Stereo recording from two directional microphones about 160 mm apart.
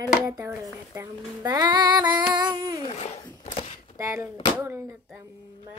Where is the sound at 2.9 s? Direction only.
35° left (ahead or behind).